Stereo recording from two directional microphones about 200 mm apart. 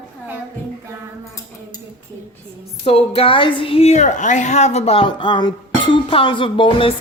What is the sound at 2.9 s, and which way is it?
A woman's voice, 30° left (ahead or behind).